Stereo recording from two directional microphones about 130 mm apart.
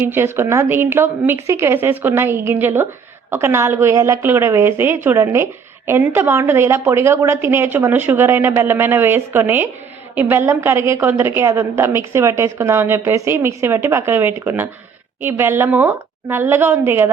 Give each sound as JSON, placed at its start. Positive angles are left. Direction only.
{"t": 0.0, "sound": "a woman's voice", "side_deg": -15}